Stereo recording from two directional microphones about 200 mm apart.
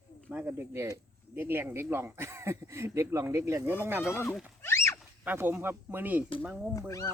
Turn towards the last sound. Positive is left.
turn(degrees=15)  # may be behind; listen again after turning